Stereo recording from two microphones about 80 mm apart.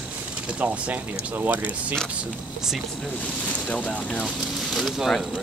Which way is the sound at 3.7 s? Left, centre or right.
Centre.